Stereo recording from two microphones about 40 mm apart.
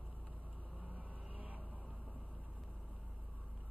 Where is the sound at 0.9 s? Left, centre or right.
Right.